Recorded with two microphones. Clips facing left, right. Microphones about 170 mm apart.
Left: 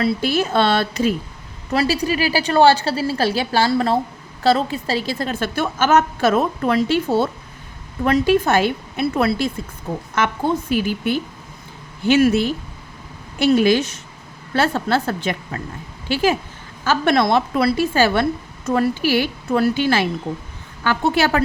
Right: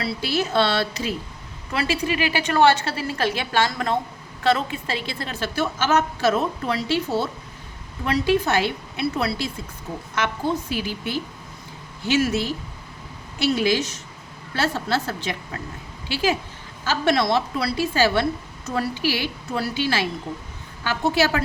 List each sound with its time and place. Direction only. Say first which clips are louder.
0.0 s a woman's voice: left 6 dB; 50° left (ahead or behind)
1.7 s a woman's voice: left 5 dB; 35° left (ahead or behind)
10.7 s a woman's voice: left 7 dB; 50° left (ahead or behind)